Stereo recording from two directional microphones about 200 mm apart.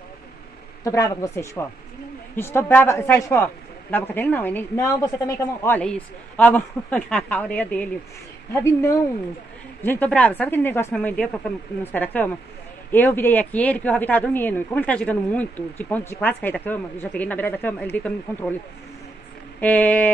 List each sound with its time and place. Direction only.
0.8 s speech: 15° left (ahead or behind)
19.6 s speech: 10° left (ahead or behind)